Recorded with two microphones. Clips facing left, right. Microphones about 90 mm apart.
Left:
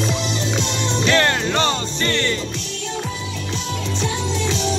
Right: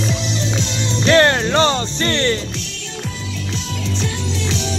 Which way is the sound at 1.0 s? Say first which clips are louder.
Right 5 dB; 35° right (ahead or behind).